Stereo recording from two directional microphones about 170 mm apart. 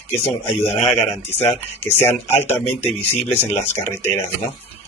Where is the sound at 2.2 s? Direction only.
40° left (ahead or behind).